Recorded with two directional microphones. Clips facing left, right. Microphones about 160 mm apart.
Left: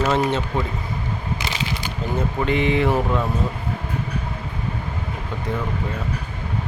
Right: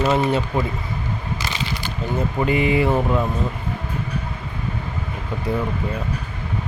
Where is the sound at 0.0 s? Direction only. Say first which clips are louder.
Right 1 dB; 5° right (ahead or behind).